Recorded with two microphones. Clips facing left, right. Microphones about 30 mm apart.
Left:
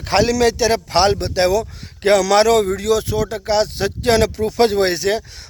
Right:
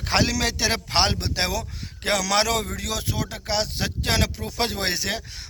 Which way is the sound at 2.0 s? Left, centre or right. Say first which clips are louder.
Left 9 dB; centre.